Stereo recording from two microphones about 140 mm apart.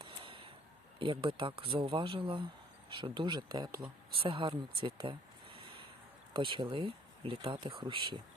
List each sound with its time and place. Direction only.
0.0 s a sound: 40° right (ahead or behind)
0.9 s speech: 40° right (ahead or behind)
4.1 s speech: 40° right (ahead or behind)